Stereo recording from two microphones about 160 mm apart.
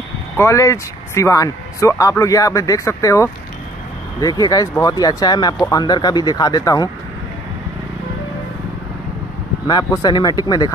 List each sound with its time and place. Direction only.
0.4 s speech: 20° left (ahead or behind)
9.7 s speech: 25° left (ahead or behind)